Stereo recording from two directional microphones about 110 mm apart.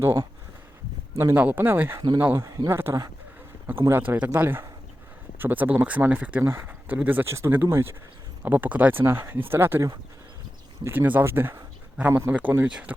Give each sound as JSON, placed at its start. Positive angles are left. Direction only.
{"t": 0.0, "sound": "speech", "side_deg": -25}
{"t": 2.4, "sound": "speech", "side_deg": -30}
{"t": 10.8, "sound": "speech", "side_deg": -15}